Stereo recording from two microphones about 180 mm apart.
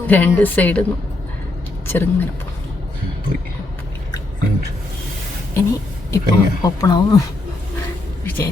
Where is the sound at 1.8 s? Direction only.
10° left (ahead or behind).